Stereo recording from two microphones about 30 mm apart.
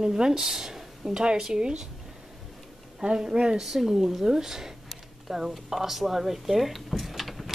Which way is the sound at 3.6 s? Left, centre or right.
Centre.